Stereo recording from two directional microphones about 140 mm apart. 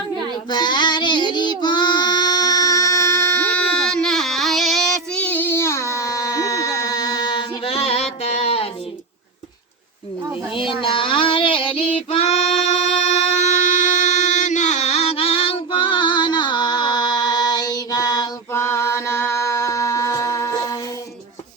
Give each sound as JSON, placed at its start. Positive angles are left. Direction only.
{"t": 0.5, "sound": "child singing", "side_deg": 30}
{"t": 7.6, "sound": "music", "side_deg": 45}
{"t": 8.2, "sound": "a sound", "side_deg": 50}
{"t": 10.5, "sound": "female singing", "side_deg": 35}
{"t": 18.5, "sound": "music", "side_deg": 20}